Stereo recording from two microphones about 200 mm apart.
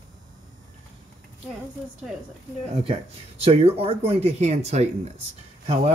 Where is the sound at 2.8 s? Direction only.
30° right (ahead or behind).